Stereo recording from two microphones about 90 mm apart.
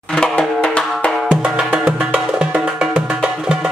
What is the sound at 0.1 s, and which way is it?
Music, 10° left (ahead or behind).